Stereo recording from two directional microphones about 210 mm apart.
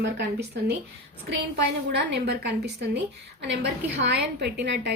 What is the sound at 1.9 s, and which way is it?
A woman's voice, 55° right (ahead or behind).